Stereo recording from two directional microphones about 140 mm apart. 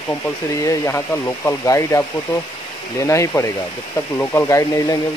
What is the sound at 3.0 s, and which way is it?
Speech, 20° left (ahead or behind).